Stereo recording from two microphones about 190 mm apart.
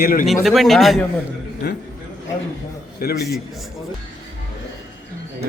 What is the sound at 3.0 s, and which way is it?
Speech, 50° left (ahead or behind).